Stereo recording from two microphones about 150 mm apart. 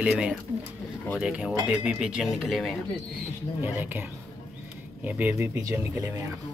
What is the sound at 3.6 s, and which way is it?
Speech, 10° right (ahead or behind).